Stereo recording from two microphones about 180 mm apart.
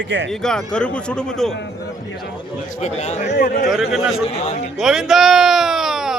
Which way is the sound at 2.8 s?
40° left (ahead or behind).